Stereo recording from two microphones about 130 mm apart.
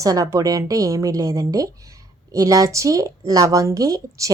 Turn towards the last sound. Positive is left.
turn(degrees=-25)  # may be behind; listen again after turning